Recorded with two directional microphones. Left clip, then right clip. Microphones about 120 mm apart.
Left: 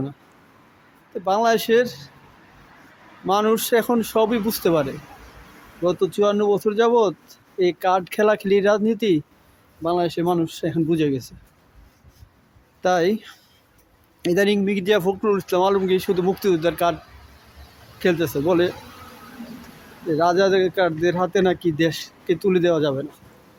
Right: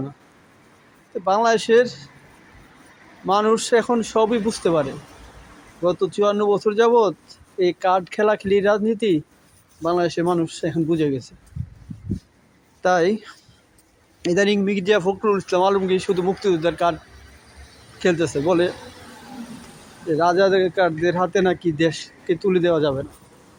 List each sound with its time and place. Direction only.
1.1 s speech: 15° left (ahead or behind)
3.2 s speech: 25° left (ahead or behind)
9.8 s speech: 5° left (ahead or behind)
10.3 s speech: 20° left (ahead or behind)
10.8 s speech: 30° left (ahead or behind)
12.8 s speech: 20° left (ahead or behind)
18.0 s speech: 20° left (ahead or behind)
20.1 s speech: 20° left (ahead or behind)